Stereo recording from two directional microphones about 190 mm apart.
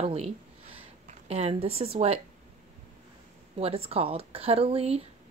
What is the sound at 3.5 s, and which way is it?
A woman's voice, 30° right (ahead or behind).